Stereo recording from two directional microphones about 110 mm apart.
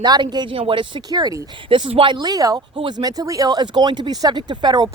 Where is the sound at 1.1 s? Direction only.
35° right (ahead or behind).